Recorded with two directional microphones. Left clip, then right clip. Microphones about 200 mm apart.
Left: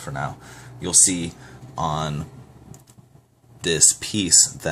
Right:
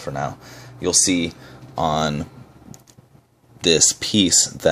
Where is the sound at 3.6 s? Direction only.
30° right (ahead or behind).